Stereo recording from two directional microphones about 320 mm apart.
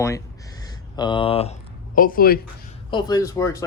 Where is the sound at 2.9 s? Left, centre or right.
Centre.